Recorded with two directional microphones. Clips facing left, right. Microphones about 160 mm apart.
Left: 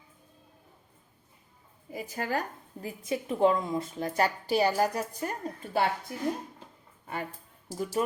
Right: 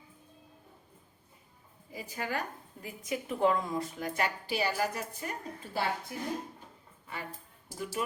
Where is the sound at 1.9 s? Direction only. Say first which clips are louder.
Left 4 dB; 45° left (ahead or behind).